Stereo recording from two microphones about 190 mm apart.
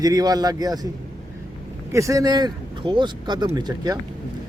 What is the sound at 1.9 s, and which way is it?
A man's voice, 15° right (ahead or behind).